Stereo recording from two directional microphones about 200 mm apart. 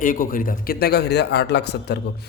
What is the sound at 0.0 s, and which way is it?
Speech, 45° left (ahead or behind).